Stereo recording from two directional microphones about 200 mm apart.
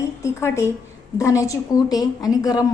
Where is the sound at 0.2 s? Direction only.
15° left (ahead or behind).